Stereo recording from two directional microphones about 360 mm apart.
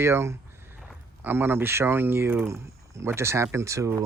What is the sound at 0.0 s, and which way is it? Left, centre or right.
Speech, centre.